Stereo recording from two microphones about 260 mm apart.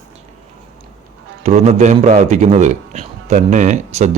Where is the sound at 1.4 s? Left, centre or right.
Right.